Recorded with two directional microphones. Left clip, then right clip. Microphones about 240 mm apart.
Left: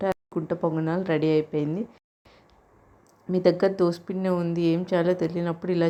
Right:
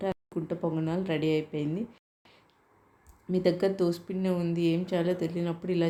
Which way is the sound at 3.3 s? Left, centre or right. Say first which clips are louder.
Left 5 dB; centre.